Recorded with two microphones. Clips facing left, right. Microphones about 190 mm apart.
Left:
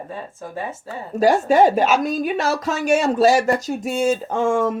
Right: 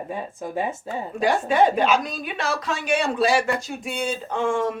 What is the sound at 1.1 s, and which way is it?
Speech, 40° left (ahead or behind).